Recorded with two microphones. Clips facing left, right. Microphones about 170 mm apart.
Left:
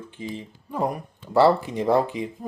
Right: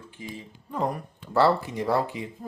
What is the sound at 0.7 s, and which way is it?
Speech, 10° left (ahead or behind).